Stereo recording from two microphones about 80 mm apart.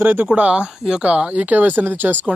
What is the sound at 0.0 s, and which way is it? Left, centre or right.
Speech, right.